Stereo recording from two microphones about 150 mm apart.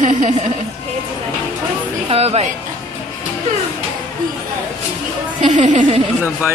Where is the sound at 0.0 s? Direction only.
55° right (ahead or behind).